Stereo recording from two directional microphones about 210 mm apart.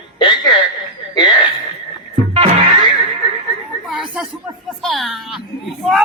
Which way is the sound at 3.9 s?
5° right (ahead or behind).